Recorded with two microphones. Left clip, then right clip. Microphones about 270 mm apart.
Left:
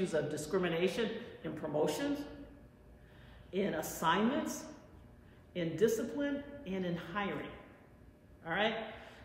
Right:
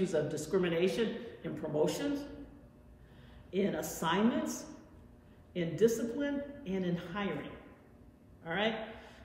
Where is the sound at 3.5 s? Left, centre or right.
Centre.